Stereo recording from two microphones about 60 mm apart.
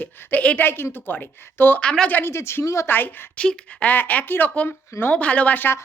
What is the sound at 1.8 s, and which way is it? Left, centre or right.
Speech, centre.